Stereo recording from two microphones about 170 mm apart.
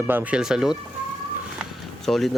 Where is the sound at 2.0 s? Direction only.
Centre (ahead or behind).